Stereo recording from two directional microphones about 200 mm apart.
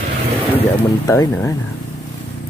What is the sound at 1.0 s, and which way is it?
Speech, 15° left (ahead or behind).